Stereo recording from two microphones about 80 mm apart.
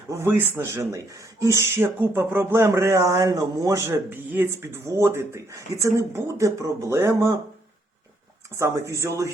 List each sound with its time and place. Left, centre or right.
0.1 s speech: right
8.5 s speech: right